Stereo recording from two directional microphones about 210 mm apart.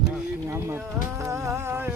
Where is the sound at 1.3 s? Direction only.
15° right (ahead or behind).